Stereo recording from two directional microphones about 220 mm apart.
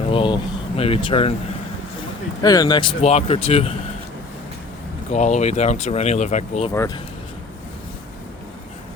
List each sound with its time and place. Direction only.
0.1 s a sound: 25° left (ahead or behind)
0.8 s speech: 25° left (ahead or behind)
2.4 s speech: 15° left (ahead or behind)
5.1 s speech: 30° left (ahead or behind)
6.7 s speech: 15° left (ahead or behind)